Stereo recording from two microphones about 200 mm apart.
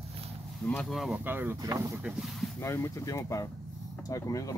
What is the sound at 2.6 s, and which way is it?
Speech, 15° left (ahead or behind).